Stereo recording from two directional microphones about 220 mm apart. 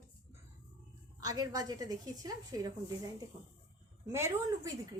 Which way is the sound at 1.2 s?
15° right (ahead or behind).